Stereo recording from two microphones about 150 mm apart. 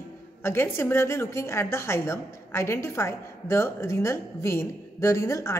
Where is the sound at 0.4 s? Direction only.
15° left (ahead or behind).